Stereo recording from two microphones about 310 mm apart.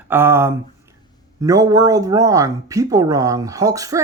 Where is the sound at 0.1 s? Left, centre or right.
Centre.